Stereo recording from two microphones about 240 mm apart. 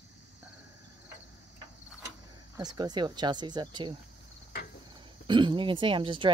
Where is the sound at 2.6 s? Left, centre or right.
Centre.